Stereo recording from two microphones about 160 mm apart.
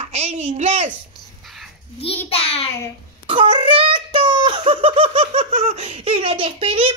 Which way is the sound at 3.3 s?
30° right (ahead or behind).